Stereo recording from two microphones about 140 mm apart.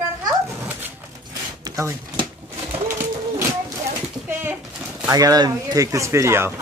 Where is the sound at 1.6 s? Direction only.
20° right (ahead or behind).